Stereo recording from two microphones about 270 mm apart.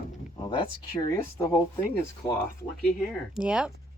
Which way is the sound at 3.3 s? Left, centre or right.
Centre.